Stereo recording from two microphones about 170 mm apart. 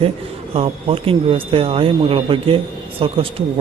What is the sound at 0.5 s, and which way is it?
A man's voice, 35° right (ahead or behind).